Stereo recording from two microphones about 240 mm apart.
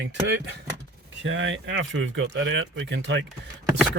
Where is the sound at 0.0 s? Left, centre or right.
Right.